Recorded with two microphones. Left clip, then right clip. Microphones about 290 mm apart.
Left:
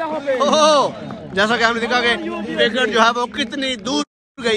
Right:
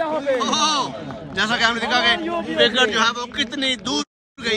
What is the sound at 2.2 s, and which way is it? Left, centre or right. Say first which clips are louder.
Speech: right 1 dB; right.